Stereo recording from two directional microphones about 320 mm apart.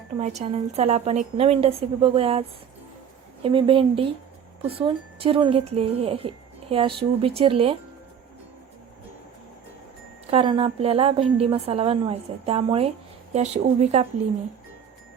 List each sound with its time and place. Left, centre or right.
0.2 s speech: right
3.4 s speech: centre
10.3 s speech: centre